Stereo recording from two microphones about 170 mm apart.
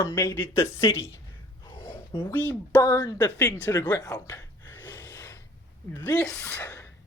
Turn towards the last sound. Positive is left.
turn(degrees=15)  # may be behind; listen again after turning